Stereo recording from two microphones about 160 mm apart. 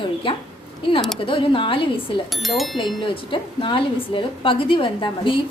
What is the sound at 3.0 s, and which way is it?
A woman's voice, 30° left (ahead or behind).